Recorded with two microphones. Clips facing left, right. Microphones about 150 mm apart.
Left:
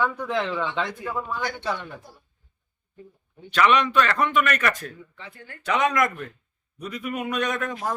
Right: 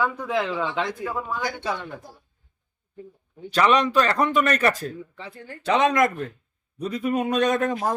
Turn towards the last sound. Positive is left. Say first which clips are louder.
# right 5 dB
turn(degrees=-35)  # may be behind; listen again after turning